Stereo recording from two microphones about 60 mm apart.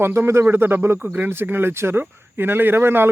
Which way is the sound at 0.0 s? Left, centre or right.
Right.